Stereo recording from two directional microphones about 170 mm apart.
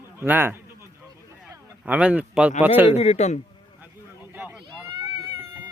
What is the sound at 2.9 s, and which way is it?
Speech, 40° left (ahead or behind).